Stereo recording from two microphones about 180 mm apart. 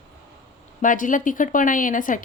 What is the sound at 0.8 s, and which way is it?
Speech, 45° left (ahead or behind).